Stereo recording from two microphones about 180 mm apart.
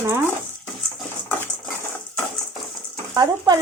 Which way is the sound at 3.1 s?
20° right (ahead or behind).